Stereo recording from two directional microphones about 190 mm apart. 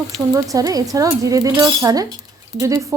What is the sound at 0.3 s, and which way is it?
Speech, 20° right (ahead or behind).